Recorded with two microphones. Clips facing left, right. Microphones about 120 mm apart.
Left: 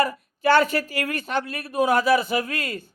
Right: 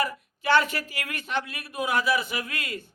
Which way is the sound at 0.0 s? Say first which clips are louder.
Left 6 dB; 40° left (ahead or behind).